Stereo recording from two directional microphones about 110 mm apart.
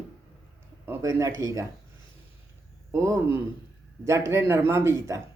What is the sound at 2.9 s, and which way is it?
A man's voice, 25° right (ahead or behind).